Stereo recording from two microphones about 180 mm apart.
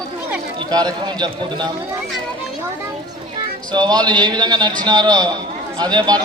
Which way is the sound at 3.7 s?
25° right (ahead or behind).